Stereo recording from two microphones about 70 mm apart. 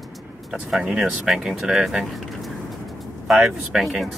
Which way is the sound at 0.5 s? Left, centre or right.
Centre.